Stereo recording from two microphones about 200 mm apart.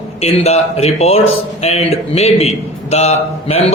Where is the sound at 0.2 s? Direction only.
30° left (ahead or behind).